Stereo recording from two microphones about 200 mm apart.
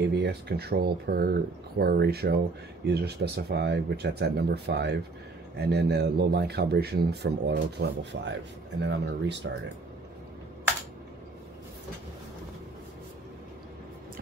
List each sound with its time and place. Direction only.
0.1 s speech: 55° right (ahead or behind)